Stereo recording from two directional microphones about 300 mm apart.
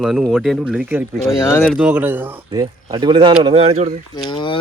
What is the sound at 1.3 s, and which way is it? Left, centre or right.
A man's voice, centre.